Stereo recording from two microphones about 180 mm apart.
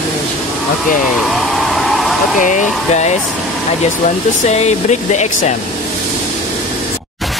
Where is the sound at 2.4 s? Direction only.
40° left (ahead or behind).